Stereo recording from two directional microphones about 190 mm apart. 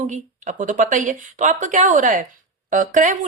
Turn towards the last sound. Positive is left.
turn(degrees=-40)  # may be behind; listen again after turning